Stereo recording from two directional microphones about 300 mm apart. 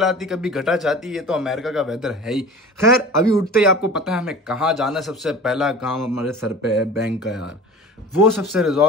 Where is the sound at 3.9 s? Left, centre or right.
Centre.